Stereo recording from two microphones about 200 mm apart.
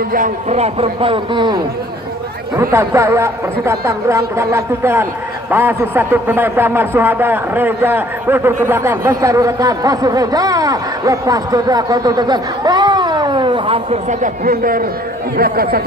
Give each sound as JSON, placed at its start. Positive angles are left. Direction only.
{"t": 0.1, "sound": "a man's voice", "side_deg": -40}